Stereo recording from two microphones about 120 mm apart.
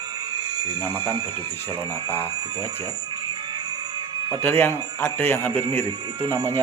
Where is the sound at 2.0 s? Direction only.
20° left (ahead or behind).